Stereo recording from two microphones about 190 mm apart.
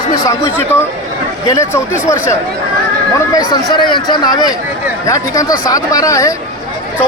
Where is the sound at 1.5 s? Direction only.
15° left (ahead or behind).